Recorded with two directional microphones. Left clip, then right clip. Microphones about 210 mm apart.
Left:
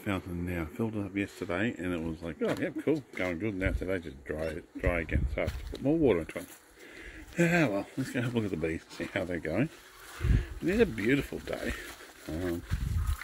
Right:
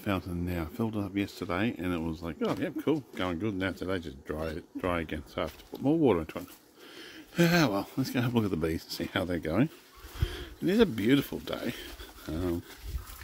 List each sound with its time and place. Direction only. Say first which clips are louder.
0.0 s speech: right 2 dB; 10° right (ahead or behind)